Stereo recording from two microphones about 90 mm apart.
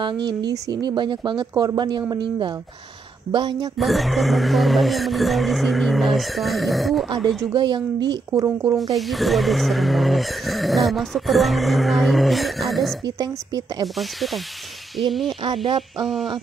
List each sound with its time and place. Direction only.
0.0 s speech: 50° right (ahead or behind)
1.5 s a woman's voice: 45° right (ahead or behind)
3.7 s speech: centre (ahead or behind)
7.5 s speech: 55° right (ahead or behind)
8.9 s speech: centre (ahead or behind)
13.0 s a woman's voice: 45° right (ahead or behind)
13.9 s speech: centre (ahead or behind)
15.4 s speech: 80° right
16.0 s speech: centre (ahead or behind)